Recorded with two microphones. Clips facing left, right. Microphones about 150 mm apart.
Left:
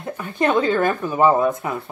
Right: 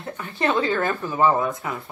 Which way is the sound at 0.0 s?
20° left (ahead or behind).